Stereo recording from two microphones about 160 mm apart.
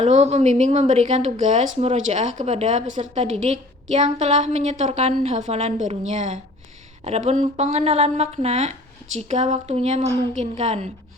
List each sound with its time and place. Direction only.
0.0 s a woman's voice: 45° right (ahead or behind)